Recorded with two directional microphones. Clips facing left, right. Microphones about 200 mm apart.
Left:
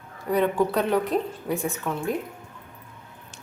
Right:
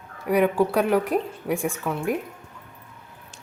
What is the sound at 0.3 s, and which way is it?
A woman's voice, 10° right (ahead or behind).